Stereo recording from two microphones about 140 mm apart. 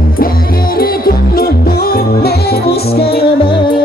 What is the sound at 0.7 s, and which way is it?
Music, 90° left.